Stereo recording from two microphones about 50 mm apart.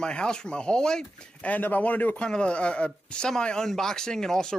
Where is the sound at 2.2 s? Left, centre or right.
Left.